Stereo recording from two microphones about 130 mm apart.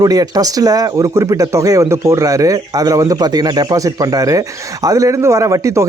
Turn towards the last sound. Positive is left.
turn(degrees=-25)  # may be behind; listen again after turning